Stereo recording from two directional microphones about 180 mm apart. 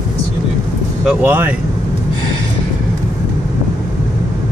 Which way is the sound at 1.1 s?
10° right (ahead or behind).